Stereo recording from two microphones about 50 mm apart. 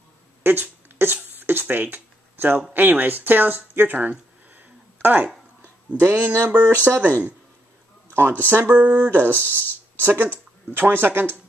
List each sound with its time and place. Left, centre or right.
0.4 s a sound: right
1.4 s speech: right
5.9 s speech: right
8.1 s speech: right
8.6 s speech: right
9.0 s speech: right
9.4 s speech: left
10.0 s speech: right